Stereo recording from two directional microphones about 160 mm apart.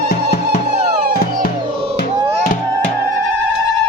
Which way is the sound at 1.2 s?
65° left (ahead or behind).